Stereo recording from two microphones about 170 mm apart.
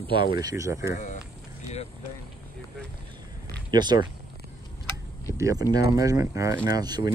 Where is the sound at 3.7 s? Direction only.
25° right (ahead or behind).